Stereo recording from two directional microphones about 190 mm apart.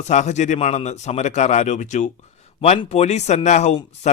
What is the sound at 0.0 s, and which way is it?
Speech, 35° left (ahead or behind).